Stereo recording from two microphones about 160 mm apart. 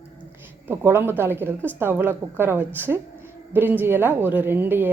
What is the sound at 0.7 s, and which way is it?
A woman's voice, 15° right (ahead or behind).